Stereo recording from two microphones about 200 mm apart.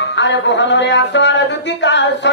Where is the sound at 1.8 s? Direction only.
65° left (ahead or behind).